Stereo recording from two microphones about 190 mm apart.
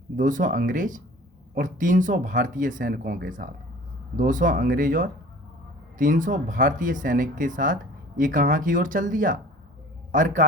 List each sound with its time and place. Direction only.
0.2 s a man's voice: 45° right (ahead or behind)